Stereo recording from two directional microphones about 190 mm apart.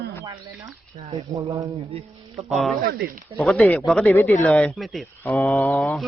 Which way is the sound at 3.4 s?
5° left (ahead or behind).